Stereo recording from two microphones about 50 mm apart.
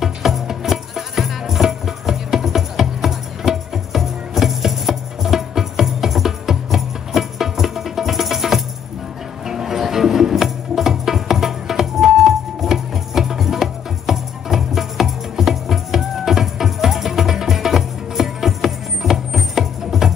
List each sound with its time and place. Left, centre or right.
0.0 s music: centre